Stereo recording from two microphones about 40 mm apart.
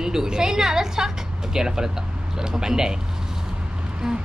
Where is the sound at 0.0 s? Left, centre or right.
Centre.